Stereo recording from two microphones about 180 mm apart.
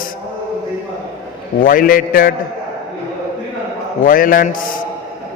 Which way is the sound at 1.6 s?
50° left (ahead or behind).